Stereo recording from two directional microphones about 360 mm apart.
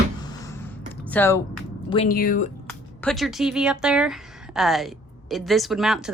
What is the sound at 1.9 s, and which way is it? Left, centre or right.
Speech, centre.